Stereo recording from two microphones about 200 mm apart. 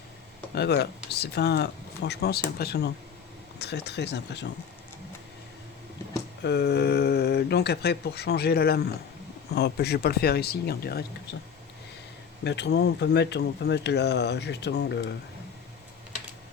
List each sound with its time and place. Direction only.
0.5 s speech: 55° left (ahead or behind)
6.4 s speech: 55° left (ahead or behind)
12.5 s speech: 60° left (ahead or behind)